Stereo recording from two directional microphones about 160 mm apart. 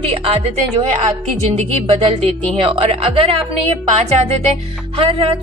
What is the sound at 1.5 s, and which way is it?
Speech, 40° right (ahead or behind).